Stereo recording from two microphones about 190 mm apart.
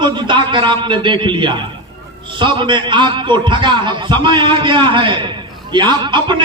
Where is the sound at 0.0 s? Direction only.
25° right (ahead or behind).